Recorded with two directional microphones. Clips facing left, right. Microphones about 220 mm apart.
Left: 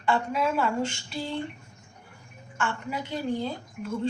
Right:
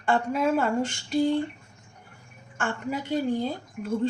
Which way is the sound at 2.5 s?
50° right (ahead or behind).